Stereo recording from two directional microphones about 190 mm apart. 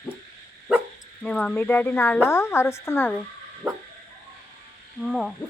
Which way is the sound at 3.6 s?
15° right (ahead or behind).